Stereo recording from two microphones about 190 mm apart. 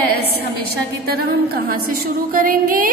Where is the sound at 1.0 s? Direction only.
55° right (ahead or behind).